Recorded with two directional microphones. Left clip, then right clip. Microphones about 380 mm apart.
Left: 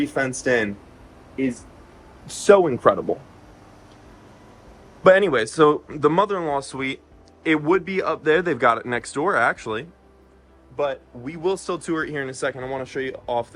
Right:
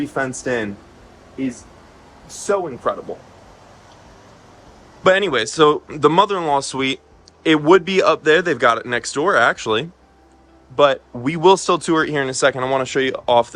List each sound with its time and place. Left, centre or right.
0.1 s speech: centre
2.5 s speech: left
5.0 s speech: centre
10.8 s speech: centre